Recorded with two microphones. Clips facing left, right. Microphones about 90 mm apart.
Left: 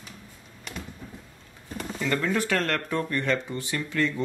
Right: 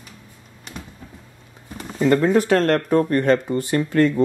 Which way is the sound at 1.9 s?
35° right (ahead or behind).